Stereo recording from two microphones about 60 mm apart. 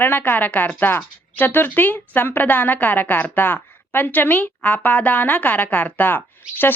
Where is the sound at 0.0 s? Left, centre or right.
Left.